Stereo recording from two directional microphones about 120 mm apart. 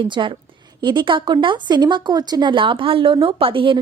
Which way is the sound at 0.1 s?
40° right (ahead or behind).